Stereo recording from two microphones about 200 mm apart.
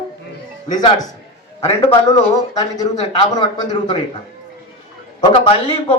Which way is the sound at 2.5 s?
20° left (ahead or behind).